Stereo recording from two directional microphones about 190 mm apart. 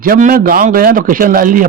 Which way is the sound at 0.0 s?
45° right (ahead or behind).